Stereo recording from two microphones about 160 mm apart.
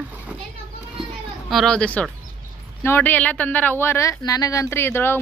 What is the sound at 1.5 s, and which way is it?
Speech, 5° left (ahead or behind).